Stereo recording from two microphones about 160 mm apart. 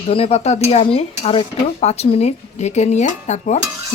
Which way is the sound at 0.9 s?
35° left (ahead or behind).